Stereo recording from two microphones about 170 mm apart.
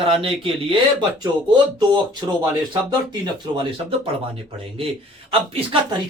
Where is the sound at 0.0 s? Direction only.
30° right (ahead or behind).